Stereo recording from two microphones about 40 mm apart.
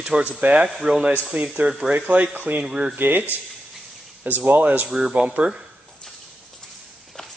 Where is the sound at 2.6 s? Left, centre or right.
Centre.